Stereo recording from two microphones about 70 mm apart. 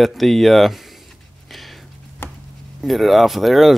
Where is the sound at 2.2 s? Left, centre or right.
Left.